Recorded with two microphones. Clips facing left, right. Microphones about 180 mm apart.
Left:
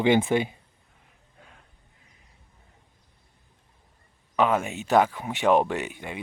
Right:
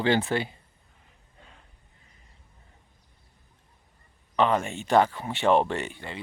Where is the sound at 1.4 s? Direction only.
Centre (ahead or behind).